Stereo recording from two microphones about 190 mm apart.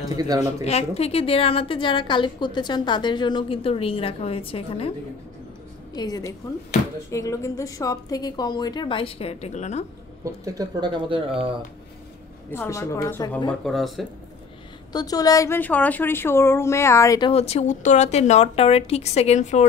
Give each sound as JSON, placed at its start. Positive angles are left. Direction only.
{"t": 0.1, "sound": "speech", "side_deg": -20}
{"t": 0.7, "sound": "a woman's voice", "side_deg": 35}
{"t": 5.9, "sound": "a woman's voice", "side_deg": 20}
{"t": 10.2, "sound": "speech", "side_deg": -20}
{"t": 12.4, "sound": "speech", "side_deg": 15}
{"t": 13.5, "sound": "speech", "side_deg": 0}
{"t": 14.9, "sound": "speech", "side_deg": 20}
{"t": 17.3, "sound": "speech", "side_deg": 35}